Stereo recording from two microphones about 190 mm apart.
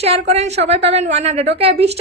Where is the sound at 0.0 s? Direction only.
35° right (ahead or behind).